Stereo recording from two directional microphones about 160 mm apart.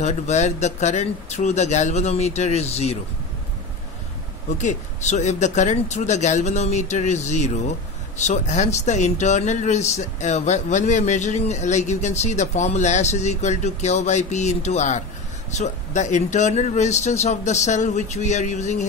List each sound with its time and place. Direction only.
0.0 s speech: 45° left (ahead or behind)
4.6 s speech: 45° left (ahead or behind)